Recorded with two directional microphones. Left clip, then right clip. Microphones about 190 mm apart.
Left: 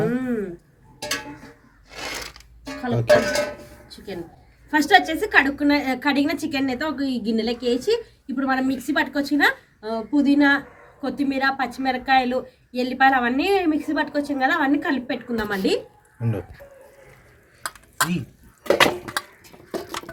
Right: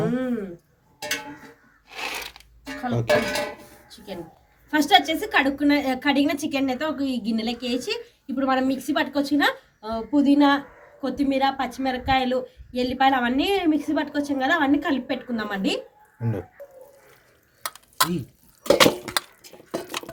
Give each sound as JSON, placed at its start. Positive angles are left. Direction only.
{"t": 0.0, "sound": "a sound", "side_deg": -5}
{"t": 2.6, "sound": "music", "side_deg": -10}
{"t": 4.7, "sound": "a woman's voice", "side_deg": 0}